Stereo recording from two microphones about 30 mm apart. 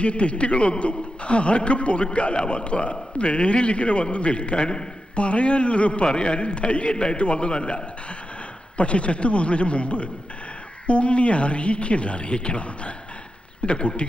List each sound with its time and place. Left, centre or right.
0.0 s a man's voice: left
2.3 s a man's voice: left
6.9 s a man's voice: left
7.2 s a man's voice: left
8.8 s a man's voice: left